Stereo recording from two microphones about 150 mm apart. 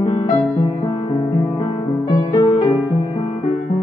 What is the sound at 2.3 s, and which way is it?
Music, 30° left (ahead or behind).